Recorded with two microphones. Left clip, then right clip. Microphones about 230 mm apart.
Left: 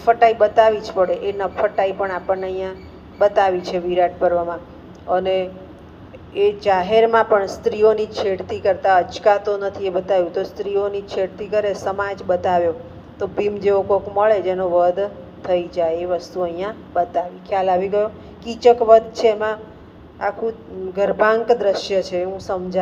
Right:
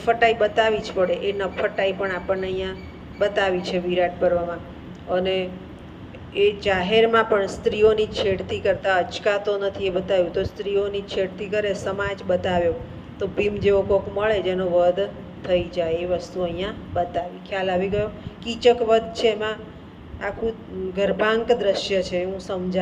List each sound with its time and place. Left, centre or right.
0.0 s a man's voice: centre